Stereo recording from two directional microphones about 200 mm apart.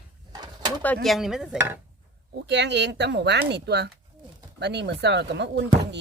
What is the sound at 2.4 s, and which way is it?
Speech, 60° right (ahead or behind).